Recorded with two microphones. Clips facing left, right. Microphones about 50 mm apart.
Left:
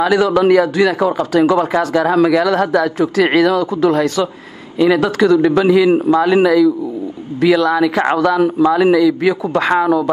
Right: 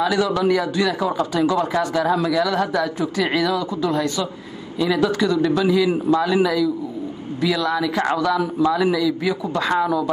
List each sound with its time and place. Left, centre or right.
0.0 s a man's voice: left